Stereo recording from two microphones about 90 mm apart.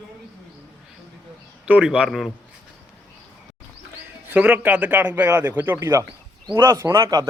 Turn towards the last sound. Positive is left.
turn(degrees=-40)  # may be behind; listen again after turning